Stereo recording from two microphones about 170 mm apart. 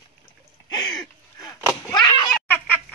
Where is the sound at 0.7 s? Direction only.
25° left (ahead or behind).